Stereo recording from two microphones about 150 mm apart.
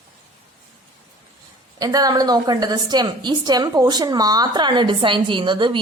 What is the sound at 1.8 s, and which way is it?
A woman's voice, 25° right (ahead or behind).